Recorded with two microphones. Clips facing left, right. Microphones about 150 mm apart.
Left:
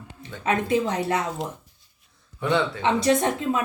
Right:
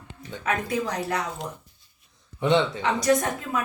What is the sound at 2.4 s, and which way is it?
Speech, 20° right (ahead or behind).